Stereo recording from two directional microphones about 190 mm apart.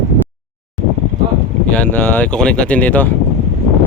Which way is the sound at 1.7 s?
10° left (ahead or behind).